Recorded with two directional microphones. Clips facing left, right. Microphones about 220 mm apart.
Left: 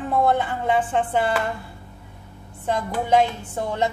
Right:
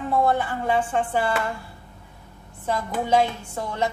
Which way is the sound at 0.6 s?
20° left (ahead or behind).